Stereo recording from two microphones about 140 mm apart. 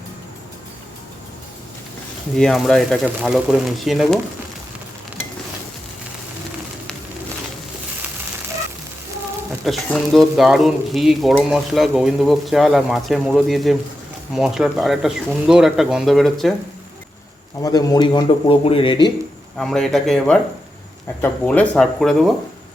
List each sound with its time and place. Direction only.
2.3 s speech: 5° left (ahead or behind)
9.6 s speech: centre (ahead or behind)
17.6 s speech: 25° left (ahead or behind)
19.5 s speech: 5° left (ahead or behind)